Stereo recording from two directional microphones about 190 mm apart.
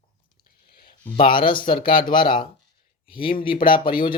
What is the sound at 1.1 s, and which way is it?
Speech, 25° left (ahead or behind).